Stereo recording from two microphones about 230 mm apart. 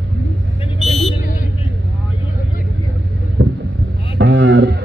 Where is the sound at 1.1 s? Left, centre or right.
Left.